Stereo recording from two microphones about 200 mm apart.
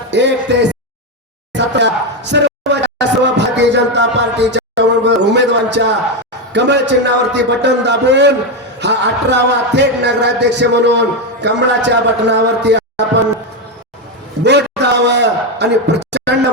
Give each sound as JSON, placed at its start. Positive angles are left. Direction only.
{"t": 0.1, "sound": "speech", "side_deg": -60}
{"t": 1.5, "sound": "music", "side_deg": -60}
{"t": 6.5, "sound": "speech", "side_deg": -60}
{"t": 14.4, "sound": "a sound", "side_deg": -60}